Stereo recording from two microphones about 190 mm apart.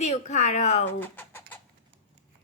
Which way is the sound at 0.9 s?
10° left (ahead or behind).